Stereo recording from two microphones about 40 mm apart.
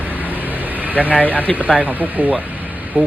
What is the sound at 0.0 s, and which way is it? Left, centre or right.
Vehicle, right.